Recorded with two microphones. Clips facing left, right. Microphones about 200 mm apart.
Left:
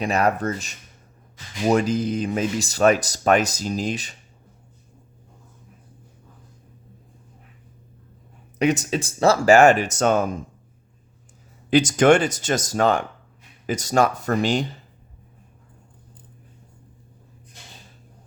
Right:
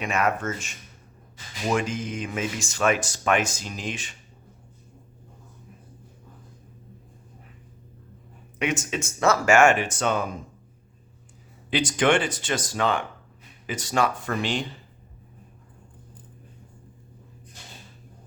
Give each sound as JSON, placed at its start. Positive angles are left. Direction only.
{"t": 0.0, "sound": "speech", "side_deg": 35}
{"t": 8.5, "sound": "speech", "side_deg": 35}
{"t": 11.7, "sound": "speech", "side_deg": 45}